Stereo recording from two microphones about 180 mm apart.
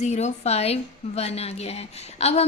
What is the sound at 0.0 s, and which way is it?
A woman's voice, 40° left (ahead or behind).